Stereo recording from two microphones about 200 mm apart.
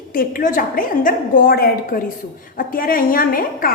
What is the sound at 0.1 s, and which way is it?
A woman's voice, 45° left (ahead or behind).